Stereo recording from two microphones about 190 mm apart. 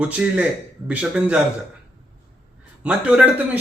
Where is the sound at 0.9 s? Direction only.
5° right (ahead or behind).